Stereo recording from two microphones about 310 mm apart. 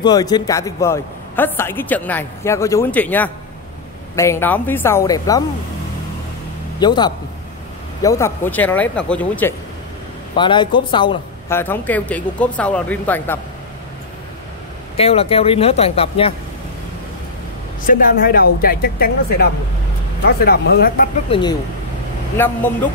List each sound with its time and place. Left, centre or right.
0.0 s a man's voice: centre
6.8 s a man's voice: centre
15.0 s a woman's voice: centre
17.8 s a woman's voice: left
21.3 s a man's voice: centre